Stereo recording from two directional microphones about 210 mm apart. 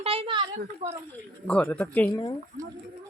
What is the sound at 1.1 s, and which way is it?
Speech, 5° left (ahead or behind).